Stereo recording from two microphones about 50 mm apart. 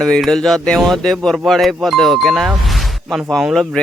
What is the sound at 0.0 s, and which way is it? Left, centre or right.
A man's voice, centre.